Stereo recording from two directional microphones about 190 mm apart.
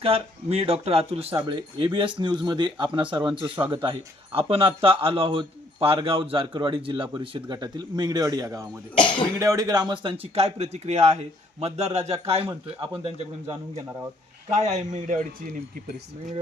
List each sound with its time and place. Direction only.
0.0 s a man's voice: 30° right (ahead or behind)
14.6 s a man's voice: 40° right (ahead or behind)